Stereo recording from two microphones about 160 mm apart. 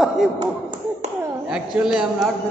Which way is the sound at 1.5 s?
5° right (ahead or behind).